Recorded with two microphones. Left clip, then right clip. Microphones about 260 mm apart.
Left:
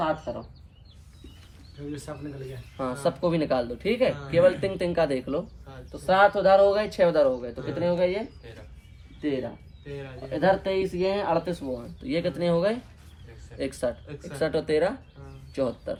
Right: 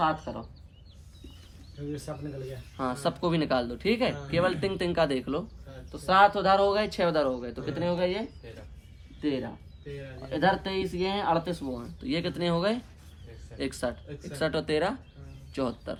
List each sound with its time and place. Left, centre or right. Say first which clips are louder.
0.0 s speech: even; centre
2.7 s speech: left 3 dB; centre
9.2 s speech: left 2 dB; centre